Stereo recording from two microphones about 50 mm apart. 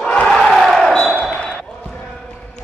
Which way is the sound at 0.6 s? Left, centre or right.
Centre.